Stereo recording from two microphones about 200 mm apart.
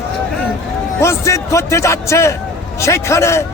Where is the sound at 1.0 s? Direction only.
15° left (ahead or behind).